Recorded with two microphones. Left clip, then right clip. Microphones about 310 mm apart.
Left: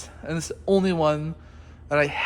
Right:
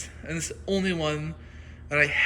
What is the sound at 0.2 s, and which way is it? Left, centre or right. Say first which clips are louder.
Speech: left 4 dB; centre.